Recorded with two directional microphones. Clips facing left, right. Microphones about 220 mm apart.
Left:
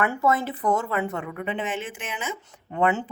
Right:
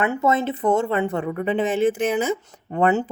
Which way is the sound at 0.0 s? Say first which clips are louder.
Right 3 dB; 20° right (ahead or behind).